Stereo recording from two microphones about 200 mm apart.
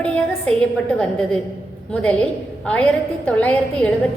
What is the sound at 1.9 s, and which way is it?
A woman's voice, 5° left (ahead or behind).